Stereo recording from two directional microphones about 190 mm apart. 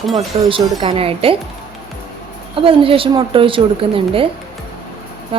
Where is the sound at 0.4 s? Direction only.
30° right (ahead or behind).